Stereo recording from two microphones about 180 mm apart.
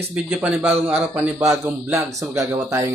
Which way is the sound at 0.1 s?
5° right (ahead or behind).